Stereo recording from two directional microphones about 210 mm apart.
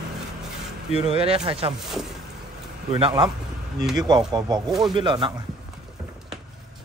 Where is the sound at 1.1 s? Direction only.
25° right (ahead or behind).